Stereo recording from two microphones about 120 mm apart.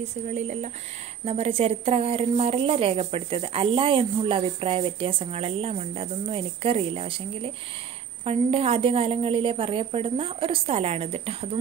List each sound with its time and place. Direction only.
0.0 s speech: 70° right (ahead or behind)
1.2 s speech: 55° right (ahead or behind)